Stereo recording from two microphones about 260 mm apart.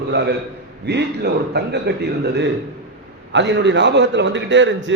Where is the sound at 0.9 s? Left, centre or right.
Right.